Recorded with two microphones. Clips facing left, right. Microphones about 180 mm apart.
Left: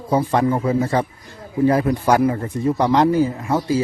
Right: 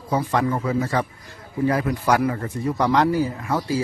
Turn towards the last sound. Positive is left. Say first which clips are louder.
# left 4 dB
turn(degrees=25)  # may be behind; listen again after turning